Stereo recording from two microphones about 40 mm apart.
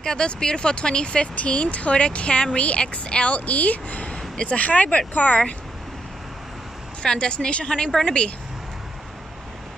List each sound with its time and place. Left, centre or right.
0.0 s speech: left
7.0 s speech: left